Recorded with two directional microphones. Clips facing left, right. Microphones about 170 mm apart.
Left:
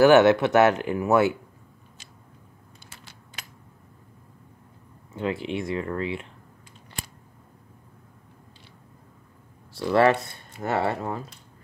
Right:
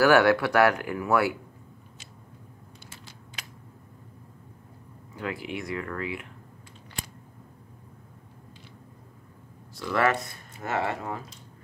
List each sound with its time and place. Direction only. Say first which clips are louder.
0.0 s speech: left 4 dB; 20° left (ahead or behind)
5.1 s speech: left 5 dB; 25° left (ahead or behind)
9.8 s speech: left 6 dB; 30° left (ahead or behind)